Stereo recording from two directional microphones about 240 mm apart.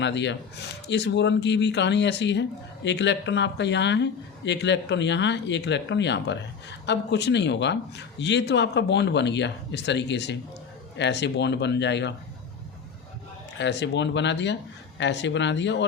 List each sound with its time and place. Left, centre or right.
0.0 s speech: left
13.6 s speech: left